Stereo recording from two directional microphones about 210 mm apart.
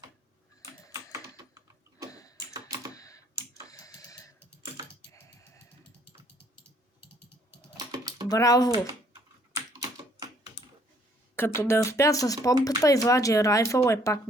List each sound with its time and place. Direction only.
1.4 s typing: 15° right (ahead or behind)
2.0 s a sound: 15° left (ahead or behind)
2.5 s typing: 20° right (ahead or behind)
2.9 s typing: 15° left (ahead or behind)
3.7 s tick-tock: 15° left (ahead or behind)
5.1 s mechanisms: 15° left (ahead or behind)
7.9 s typing: 20° right (ahead or behind)
8.3 s speech: 15° left (ahead or behind)
9.7 s typing: 15° right (ahead or behind)
11.3 s speech: 10° left (ahead or behind)